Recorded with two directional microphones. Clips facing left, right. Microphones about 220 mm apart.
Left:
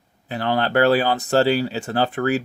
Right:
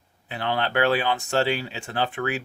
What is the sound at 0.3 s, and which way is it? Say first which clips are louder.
Speech: left 5 dB; 40° left (ahead or behind).